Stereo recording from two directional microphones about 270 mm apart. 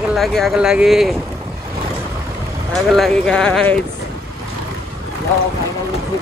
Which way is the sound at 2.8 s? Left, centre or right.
Centre.